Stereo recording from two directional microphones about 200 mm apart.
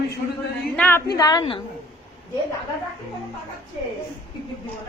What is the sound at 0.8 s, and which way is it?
Speech, 10° left (ahead or behind).